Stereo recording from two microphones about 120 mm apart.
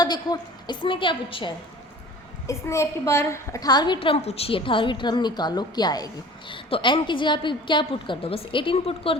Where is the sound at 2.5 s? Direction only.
25° left (ahead or behind).